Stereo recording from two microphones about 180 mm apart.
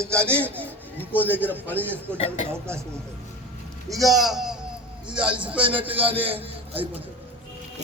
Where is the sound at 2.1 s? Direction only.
35° left (ahead or behind).